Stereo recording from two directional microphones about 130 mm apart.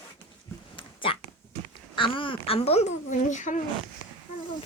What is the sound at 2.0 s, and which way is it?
Speech, 40° left (ahead or behind).